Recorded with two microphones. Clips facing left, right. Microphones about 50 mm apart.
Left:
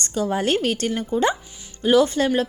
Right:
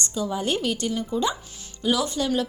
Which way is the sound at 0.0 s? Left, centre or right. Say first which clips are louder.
Left 4 dB; left.